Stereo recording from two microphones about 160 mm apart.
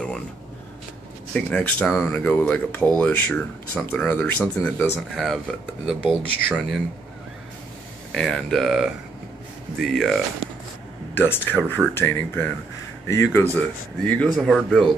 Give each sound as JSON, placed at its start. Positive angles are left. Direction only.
{"t": 1.3, "sound": "speech", "side_deg": 10}
{"t": 5.1, "sound": "speech", "side_deg": 0}
{"t": 8.1, "sound": "speech", "side_deg": 5}
{"t": 13.6, "sound": "speech", "side_deg": 5}